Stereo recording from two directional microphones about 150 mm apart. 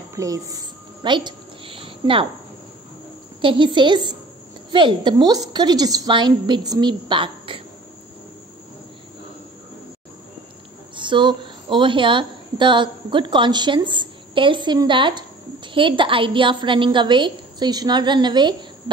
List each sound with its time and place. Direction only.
0.1 s a sound: 20° right (ahead or behind)
3.3 s a woman's voice: 35° right (ahead or behind)
11.0 s a woman's voice: 30° right (ahead or behind)